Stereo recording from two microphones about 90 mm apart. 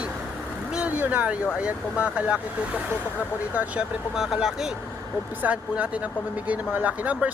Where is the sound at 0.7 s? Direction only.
15° right (ahead or behind).